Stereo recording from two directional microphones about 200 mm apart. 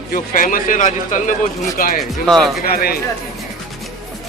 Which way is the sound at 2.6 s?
50° left (ahead or behind).